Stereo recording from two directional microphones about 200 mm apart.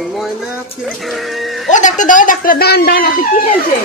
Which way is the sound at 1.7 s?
40° left (ahead or behind).